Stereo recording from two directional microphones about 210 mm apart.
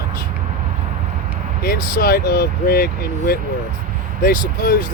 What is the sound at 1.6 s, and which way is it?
Speech, 45° left (ahead or behind).